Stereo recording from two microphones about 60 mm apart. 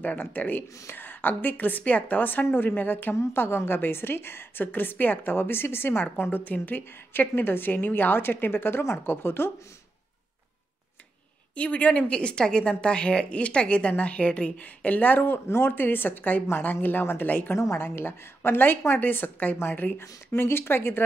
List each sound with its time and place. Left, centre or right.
0.0 s a woman's voice: left
3.2 s a woman's voice: left
11.5 s a woman's voice: left
20.0 s a woman's voice: left